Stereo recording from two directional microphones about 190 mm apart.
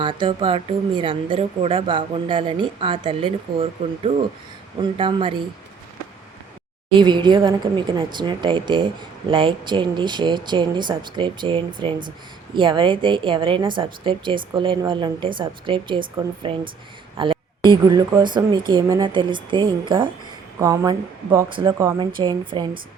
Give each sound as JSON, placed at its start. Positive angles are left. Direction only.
{"t": 0.0, "sound": "speech", "side_deg": -25}
{"t": 6.9, "sound": "speech", "side_deg": -25}